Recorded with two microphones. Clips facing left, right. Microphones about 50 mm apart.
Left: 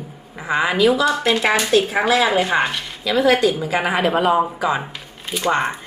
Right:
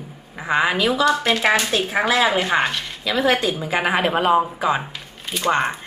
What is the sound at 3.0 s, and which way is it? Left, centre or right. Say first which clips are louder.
A woman's voice: left 4 dB; centre.